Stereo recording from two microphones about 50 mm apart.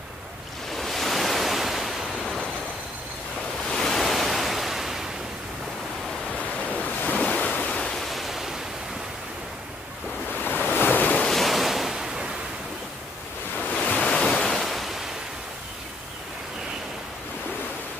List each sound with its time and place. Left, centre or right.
0.7 s waves: centre
3.6 s waves: centre
7.2 s waves: left
7.8 s pink noise: centre
8.1 s waves: centre
10.4 s waves: left
11.3 s waves: centre
13.6 s waves: left
13.9 s waves: centre
14.6 s waves: centre